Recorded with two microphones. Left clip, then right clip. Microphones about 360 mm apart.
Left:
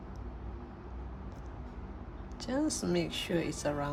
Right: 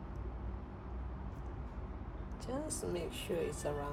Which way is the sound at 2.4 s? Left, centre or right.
Left.